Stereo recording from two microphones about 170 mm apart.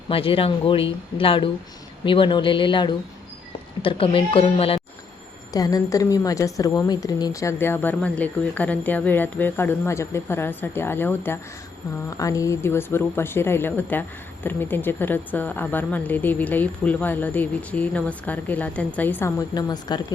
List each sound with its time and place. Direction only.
0.1 s a woman's voice: 35° left (ahead or behind)
5.5 s a woman's voice: 20° left (ahead or behind)